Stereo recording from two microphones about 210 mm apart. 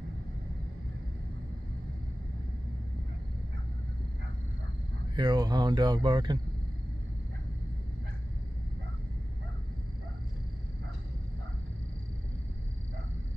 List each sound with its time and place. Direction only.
5.1 s speech: 20° right (ahead or behind)